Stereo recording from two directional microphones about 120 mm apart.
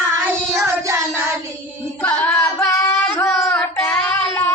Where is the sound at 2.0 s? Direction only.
10° left (ahead or behind).